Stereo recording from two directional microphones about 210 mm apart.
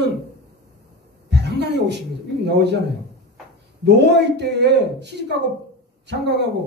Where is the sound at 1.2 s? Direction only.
55° right (ahead or behind).